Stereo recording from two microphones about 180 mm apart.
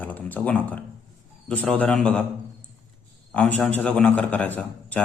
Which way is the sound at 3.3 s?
5° left (ahead or behind).